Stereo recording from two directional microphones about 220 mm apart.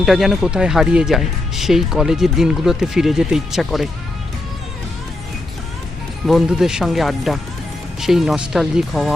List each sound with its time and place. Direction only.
0.0 s speech: centre (ahead or behind)
6.2 s speech: centre (ahead or behind)